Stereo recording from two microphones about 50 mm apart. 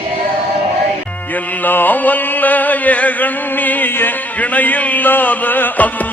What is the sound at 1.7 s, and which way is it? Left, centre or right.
Music, left.